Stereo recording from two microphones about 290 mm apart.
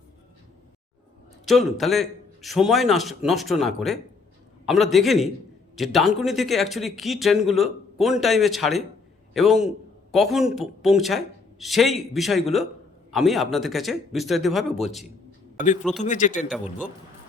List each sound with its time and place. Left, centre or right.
1.5 s a man's voice: centre
15.5 s a man's voice: left
15.8 s speech: centre
16.0 s a man's voice: left